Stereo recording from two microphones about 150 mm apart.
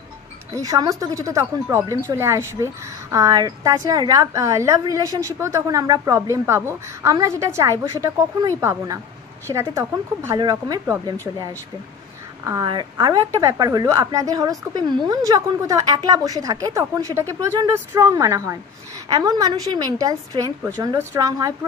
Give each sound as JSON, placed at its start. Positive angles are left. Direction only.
{"t": 0.5, "sound": "speech", "side_deg": -25}
{"t": 12.6, "sound": "speech", "side_deg": -30}